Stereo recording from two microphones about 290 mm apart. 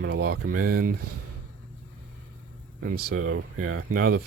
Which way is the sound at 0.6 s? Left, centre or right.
Right.